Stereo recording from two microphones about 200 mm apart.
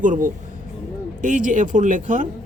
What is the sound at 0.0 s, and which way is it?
Speech, 40° right (ahead or behind).